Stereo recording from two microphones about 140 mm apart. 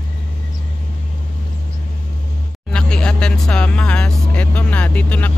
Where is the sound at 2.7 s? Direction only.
5° left (ahead or behind).